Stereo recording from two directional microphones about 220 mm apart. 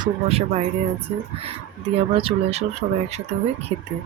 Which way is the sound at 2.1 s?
25° right (ahead or behind).